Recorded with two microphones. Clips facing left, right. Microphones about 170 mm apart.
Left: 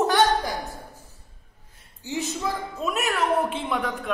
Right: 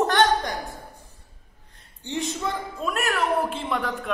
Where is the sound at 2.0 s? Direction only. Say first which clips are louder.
Even; 5° left (ahead or behind).